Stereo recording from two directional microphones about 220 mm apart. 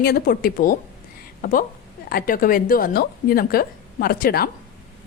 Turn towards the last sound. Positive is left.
turn(degrees=45)  # may be behind; listen again after turning